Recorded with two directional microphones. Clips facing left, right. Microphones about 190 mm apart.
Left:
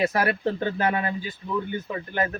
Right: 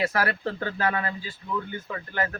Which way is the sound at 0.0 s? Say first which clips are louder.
Left 3 dB; 20° left (ahead or behind).